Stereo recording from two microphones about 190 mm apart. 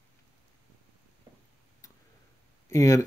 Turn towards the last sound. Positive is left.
turn(degrees=15)  # may be behind; listen again after turning